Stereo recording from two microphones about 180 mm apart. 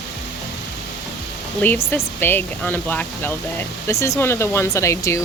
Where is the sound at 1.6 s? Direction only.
10° left (ahead or behind).